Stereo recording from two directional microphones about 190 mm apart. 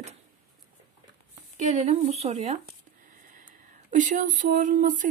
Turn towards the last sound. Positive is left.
turn(degrees=-45)  # may be behind; listen again after turning